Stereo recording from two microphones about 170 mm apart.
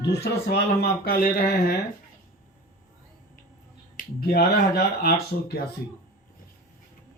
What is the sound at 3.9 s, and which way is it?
Speech, 65° left (ahead or behind).